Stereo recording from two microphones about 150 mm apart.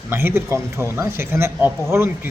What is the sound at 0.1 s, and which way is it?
Speech, 15° right (ahead or behind).